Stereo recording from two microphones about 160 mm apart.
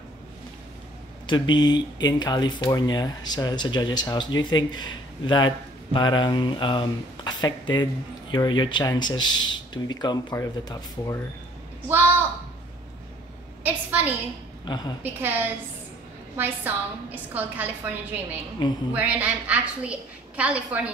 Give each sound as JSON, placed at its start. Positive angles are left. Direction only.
{"t": 1.2, "sound": "speech", "side_deg": 30}
{"t": 13.7, "sound": "a woman's voice", "side_deg": -10}
{"t": 14.7, "sound": "speech", "side_deg": 25}
{"t": 15.1, "sound": "a woman's voice", "side_deg": -10}